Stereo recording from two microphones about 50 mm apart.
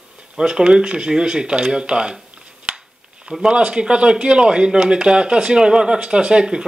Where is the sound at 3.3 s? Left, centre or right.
Centre.